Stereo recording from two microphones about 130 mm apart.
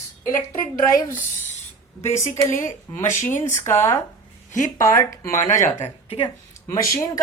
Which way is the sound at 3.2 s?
15° left (ahead or behind).